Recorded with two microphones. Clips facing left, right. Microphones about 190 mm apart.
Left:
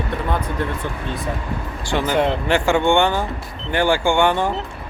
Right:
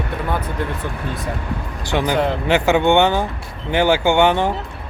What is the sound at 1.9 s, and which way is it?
Speech, 15° right (ahead or behind).